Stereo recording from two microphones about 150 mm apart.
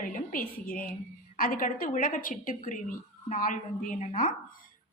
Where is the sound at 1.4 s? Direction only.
70° left (ahead or behind).